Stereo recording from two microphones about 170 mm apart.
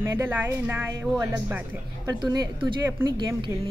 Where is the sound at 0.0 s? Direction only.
15° right (ahead or behind).